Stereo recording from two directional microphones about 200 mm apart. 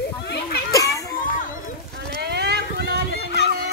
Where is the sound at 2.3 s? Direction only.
55° right (ahead or behind).